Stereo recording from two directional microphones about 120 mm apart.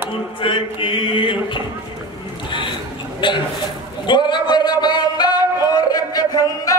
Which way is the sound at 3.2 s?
45° left (ahead or behind).